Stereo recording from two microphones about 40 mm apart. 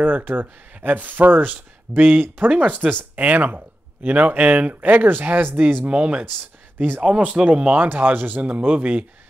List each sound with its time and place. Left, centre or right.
0.0 s speech: right
5.9 s speech: right
7.9 s speech: right
8.4 s speech: right